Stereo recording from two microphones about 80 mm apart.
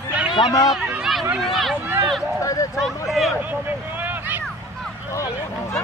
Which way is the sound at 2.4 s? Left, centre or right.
Left.